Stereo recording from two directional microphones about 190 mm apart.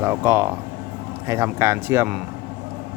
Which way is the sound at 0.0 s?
10° right (ahead or behind).